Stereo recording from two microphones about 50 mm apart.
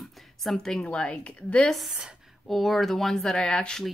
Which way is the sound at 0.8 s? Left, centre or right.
Left.